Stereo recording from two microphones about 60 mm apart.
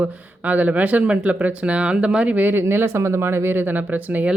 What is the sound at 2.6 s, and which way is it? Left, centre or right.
Speech, right.